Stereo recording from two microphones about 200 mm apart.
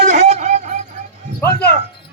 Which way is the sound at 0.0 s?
35° right (ahead or behind).